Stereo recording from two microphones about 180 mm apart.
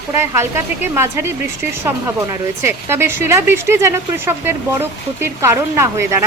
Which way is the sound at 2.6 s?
15° right (ahead or behind).